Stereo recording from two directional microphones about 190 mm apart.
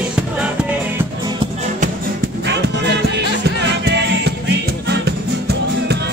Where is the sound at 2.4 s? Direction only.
65° right (ahead or behind).